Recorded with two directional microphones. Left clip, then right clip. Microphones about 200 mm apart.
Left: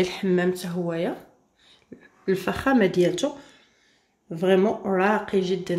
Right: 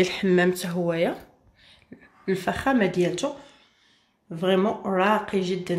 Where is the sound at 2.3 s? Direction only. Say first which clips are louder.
Left 1 dB; centre (ahead or behind).